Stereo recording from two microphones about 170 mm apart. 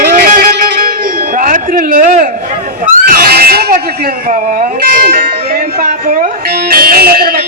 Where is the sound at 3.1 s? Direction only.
60° right (ahead or behind).